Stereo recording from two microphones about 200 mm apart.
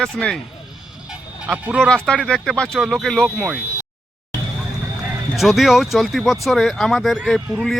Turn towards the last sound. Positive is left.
turn(degrees=0)  # may be behind; listen again after turning